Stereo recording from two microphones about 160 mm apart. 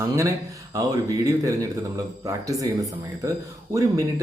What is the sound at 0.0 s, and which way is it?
Speech, 20° right (ahead or behind).